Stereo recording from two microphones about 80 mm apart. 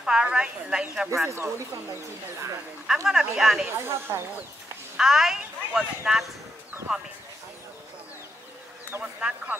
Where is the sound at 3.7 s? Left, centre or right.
Right.